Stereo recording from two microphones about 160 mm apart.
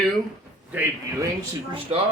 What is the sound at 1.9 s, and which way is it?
Speech, 40° right (ahead or behind).